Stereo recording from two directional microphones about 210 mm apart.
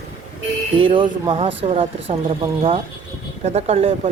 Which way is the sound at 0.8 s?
25° right (ahead or behind).